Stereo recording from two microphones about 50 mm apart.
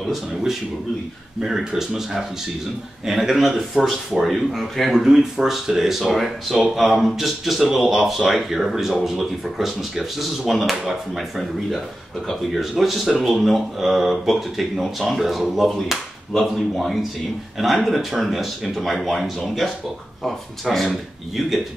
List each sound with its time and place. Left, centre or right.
1.4 s speech: centre
4.9 s speech: centre